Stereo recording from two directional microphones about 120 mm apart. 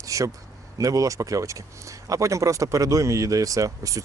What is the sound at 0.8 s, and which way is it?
Speech, 30° right (ahead or behind).